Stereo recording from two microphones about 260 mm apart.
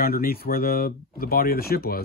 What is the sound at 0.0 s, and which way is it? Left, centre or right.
Speech, left.